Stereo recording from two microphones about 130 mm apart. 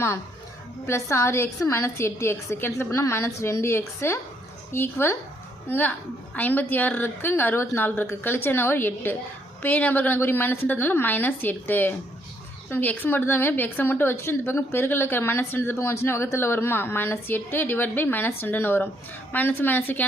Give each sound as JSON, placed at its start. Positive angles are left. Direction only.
{"t": 1.1, "sound": "a woman's voice", "side_deg": 20}